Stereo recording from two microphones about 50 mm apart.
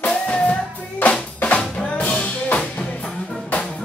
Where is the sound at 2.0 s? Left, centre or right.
Left.